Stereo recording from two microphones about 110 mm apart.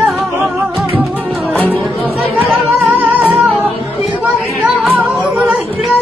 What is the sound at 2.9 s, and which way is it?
Music, 15° right (ahead or behind).